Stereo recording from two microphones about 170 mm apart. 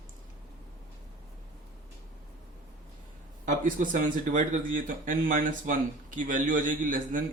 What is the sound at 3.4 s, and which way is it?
Speech, 50° right (ahead or behind).